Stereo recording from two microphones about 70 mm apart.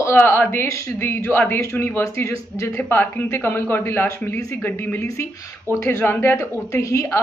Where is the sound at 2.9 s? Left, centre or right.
Left.